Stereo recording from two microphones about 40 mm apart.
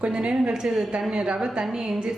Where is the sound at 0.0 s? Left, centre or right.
Right.